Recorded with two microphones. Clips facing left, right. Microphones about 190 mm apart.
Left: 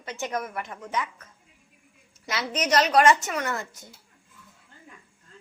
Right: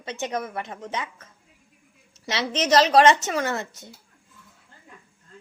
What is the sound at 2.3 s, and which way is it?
A woman's voice, 25° right (ahead or behind).